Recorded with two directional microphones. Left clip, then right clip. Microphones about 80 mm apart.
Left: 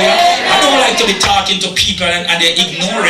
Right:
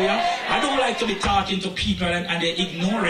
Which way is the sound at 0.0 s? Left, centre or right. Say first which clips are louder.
Left 12 dB; right.